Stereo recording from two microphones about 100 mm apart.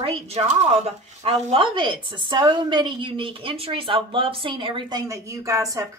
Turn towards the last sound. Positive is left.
turn(degrees=-30)  # may be behind; listen again after turning